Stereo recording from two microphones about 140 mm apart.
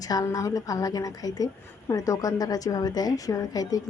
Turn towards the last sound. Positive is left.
turn(degrees=25)  # may be behind; listen again after turning